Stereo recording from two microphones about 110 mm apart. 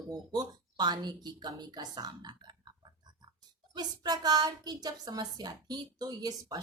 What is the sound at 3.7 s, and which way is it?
Speech, 40° right (ahead or behind).